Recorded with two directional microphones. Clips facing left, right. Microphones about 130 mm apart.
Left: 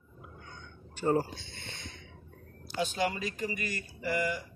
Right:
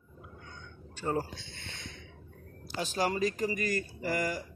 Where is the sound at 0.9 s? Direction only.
15° left (ahead or behind).